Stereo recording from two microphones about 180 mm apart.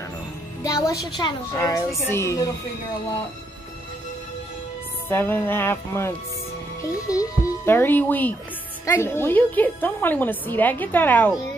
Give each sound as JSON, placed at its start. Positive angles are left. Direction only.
{"t": 0.7, "sound": "a woman's voice", "side_deg": 20}
{"t": 5.1, "sound": "a woman's voice", "side_deg": 10}